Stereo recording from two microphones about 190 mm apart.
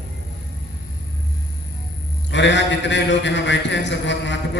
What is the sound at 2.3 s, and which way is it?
A man's voice, 65° left (ahead or behind).